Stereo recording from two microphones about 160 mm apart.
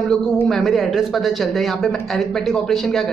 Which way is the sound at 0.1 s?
Centre (ahead or behind).